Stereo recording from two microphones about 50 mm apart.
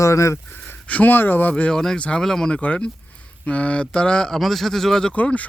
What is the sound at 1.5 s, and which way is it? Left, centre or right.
Speech, centre.